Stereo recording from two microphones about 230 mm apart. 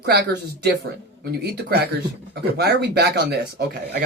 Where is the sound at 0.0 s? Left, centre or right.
Right.